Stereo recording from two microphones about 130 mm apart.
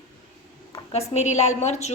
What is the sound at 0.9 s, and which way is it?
A woman's voice, 55° left (ahead or behind).